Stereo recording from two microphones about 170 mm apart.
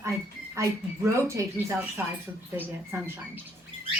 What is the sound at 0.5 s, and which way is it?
A woman's voice, 15° right (ahead or behind).